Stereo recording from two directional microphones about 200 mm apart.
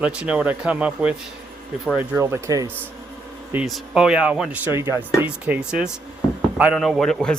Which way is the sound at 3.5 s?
5° right (ahead or behind).